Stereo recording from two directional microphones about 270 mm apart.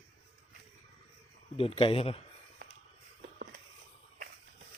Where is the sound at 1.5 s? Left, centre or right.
Left.